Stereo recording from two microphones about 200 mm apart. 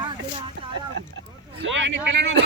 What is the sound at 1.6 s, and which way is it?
Speech, 65° right (ahead or behind).